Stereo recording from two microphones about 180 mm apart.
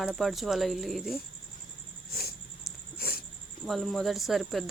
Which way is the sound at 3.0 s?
55° left (ahead or behind).